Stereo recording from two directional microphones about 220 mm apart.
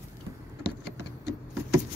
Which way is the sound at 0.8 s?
45° left (ahead or behind).